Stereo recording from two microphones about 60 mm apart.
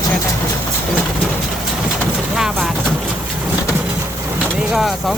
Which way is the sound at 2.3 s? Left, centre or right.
Centre.